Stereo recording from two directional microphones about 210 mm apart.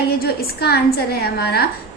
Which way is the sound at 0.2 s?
50° left (ahead or behind).